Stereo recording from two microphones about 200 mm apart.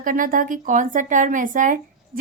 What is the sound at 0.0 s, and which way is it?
Speech, 45° right (ahead or behind).